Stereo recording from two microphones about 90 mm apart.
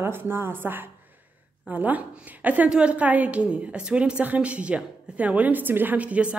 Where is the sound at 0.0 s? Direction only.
25° right (ahead or behind).